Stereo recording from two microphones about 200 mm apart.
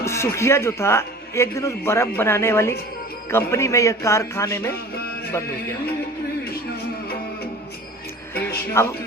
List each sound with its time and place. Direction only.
0.0 s a man's voice: 15° left (ahead or behind)
8.8 s a man's voice: 15° left (ahead or behind)